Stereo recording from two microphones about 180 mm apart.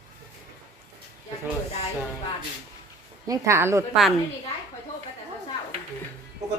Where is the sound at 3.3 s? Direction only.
15° right (ahead or behind).